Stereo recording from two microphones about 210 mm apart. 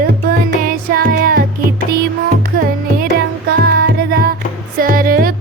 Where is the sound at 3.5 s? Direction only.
50° right (ahead or behind).